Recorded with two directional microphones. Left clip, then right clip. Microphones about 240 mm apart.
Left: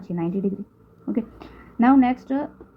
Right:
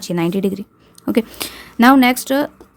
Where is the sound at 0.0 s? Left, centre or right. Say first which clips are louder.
Right 8 dB; right.